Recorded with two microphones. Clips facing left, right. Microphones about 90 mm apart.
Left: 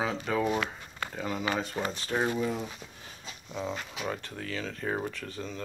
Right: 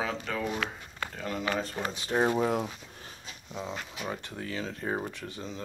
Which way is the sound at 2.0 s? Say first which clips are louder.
Right 5 dB; 25° right (ahead or behind).